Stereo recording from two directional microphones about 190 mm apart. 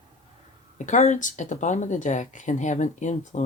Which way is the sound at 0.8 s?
40° left (ahead or behind).